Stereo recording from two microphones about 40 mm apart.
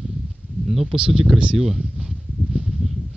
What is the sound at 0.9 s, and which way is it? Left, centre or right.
Speech, right.